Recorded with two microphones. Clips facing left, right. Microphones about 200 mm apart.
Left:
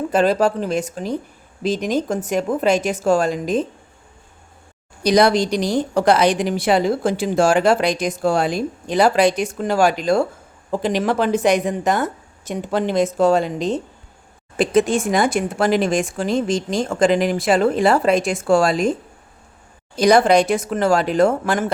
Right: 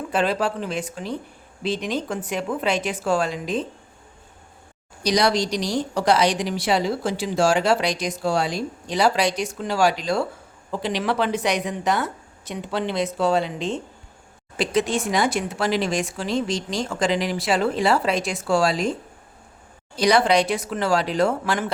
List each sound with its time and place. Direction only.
0.1 s a woman's voice: 45° left (ahead or behind)
5.0 s a woman's voice: 55° left (ahead or behind)
14.5 s a woman's voice: 50° left (ahead or behind)
20.0 s a woman's voice: 50° left (ahead or behind)